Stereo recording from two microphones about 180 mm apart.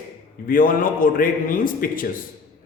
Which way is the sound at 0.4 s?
50° left (ahead or behind).